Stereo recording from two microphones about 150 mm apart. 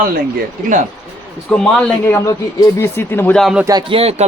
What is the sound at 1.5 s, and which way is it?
A man's voice, 5° left (ahead or behind).